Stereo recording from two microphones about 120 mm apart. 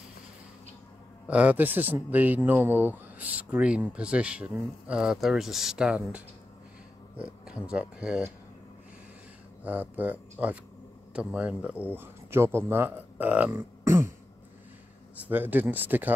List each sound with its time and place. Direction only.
1.2 s speech: 10° right (ahead or behind)
7.4 s speech: 10° right (ahead or behind)
9.6 s speech: 15° right (ahead or behind)
13.5 s beatboxing: 20° right (ahead or behind)
15.1 s speech: 15° right (ahead or behind)